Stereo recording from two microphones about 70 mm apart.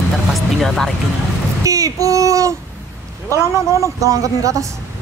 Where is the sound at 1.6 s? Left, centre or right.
Right.